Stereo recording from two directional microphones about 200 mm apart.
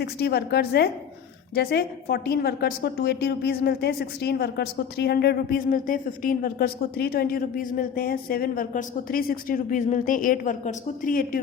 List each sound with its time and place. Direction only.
0.0 s a woman's voice: 55° left (ahead or behind)